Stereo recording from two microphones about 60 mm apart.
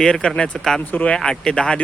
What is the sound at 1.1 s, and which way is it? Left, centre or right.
Speech, centre.